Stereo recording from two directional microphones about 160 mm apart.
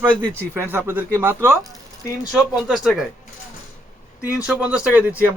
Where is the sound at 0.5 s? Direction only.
10° right (ahead or behind).